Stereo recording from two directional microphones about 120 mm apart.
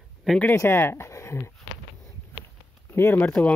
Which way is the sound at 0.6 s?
20° left (ahead or behind).